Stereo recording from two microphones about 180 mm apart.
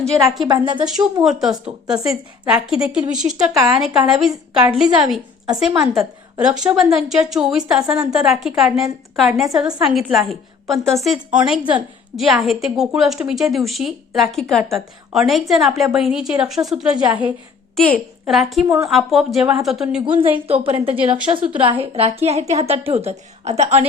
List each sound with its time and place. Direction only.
0.4 s a woman's voice: 25° right (ahead or behind)
0.9 s a woman's voice: centre (ahead or behind)
17.7 s a woman's voice: 5° left (ahead or behind)
20.5 s a woman's voice: 30° right (ahead or behind)